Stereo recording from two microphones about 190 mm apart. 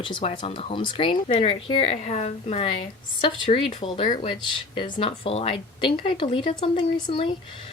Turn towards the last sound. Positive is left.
turn(degrees=25)  # may be behind; listen again after turning